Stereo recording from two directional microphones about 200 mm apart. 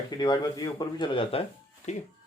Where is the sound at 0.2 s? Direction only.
20° left (ahead or behind); by 2.0 s 35° left (ahead or behind).